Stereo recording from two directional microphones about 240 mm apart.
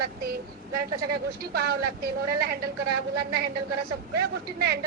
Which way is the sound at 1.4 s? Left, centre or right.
Right.